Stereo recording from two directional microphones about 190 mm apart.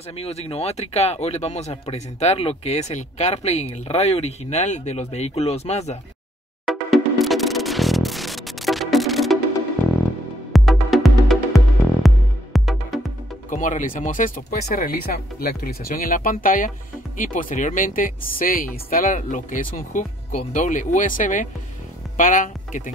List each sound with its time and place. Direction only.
0.1 s speech: 35° left (ahead or behind)
6.6 s music: centre (ahead or behind)
10.5 s music: centre (ahead or behind)
13.5 s speech: 40° left (ahead or behind)